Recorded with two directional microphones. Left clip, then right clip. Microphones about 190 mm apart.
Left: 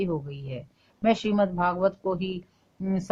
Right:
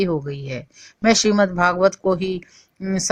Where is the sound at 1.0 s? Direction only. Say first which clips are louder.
Right 7 dB; 30° right (ahead or behind).